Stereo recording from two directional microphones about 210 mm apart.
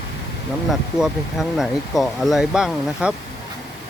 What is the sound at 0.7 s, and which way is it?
Speech, centre (ahead or behind).